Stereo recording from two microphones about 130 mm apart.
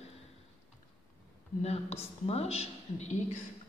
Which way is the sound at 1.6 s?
55° left (ahead or behind).